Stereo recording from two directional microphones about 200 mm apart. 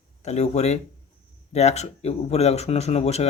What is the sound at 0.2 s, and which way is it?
Speech, 35° left (ahead or behind).